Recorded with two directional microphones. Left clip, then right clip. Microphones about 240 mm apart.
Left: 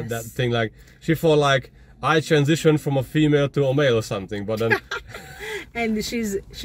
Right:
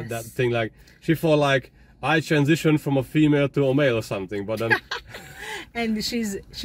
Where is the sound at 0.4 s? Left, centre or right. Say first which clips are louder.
Even; centre.